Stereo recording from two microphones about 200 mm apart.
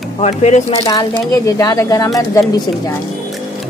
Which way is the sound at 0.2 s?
35° left (ahead or behind).